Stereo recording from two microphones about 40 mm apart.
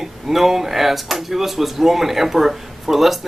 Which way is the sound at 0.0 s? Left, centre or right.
Centre.